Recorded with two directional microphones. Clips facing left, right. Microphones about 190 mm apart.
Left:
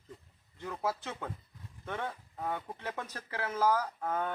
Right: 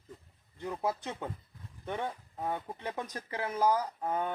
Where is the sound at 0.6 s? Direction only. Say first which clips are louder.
Right 2 dB; 15° right (ahead or behind).